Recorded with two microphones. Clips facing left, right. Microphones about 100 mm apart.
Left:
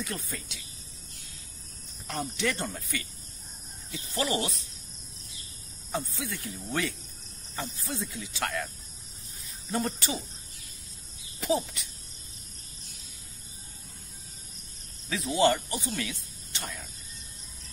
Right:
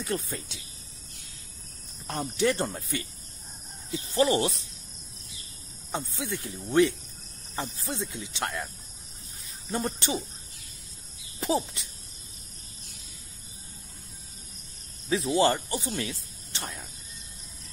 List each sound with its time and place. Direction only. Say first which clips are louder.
0.0 s speech: right 5 dB; 30° right (ahead or behind)
2.0 s speech: right 5 dB; 30° right (ahead or behind)
5.9 s speech: right 1 dB; 25° right (ahead or behind)
9.7 s speech: right 1 dB; 25° right (ahead or behind)
11.3 s speech: right 1 dB; 30° right (ahead or behind)
15.0 s speech: right 1 dB; 30° right (ahead or behind)